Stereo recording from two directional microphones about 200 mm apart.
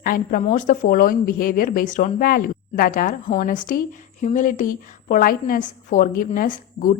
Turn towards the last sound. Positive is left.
turn(degrees=40)  # may be behind; listen again after turning